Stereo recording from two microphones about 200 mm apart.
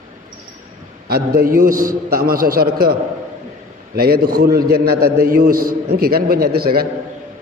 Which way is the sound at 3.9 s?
50° right (ahead or behind).